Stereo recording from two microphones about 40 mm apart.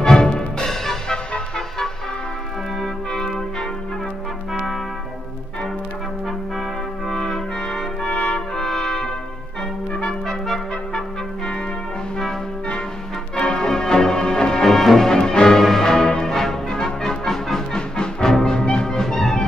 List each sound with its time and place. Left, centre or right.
0.0 s music: centre
0.7 s music: centre
2.8 s music: centre
7.2 s trumpet: centre
8.1 s trumpet: left
8.5 s trumpet: centre
13.4 s music: left